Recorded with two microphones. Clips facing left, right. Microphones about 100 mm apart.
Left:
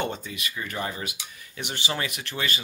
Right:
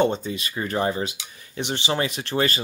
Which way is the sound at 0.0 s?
30° right (ahead or behind).